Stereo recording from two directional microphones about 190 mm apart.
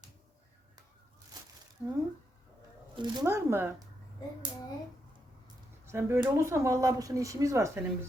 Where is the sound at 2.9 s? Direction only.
20° right (ahead or behind).